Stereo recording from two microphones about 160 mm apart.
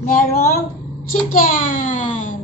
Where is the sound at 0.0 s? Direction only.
65° left (ahead or behind).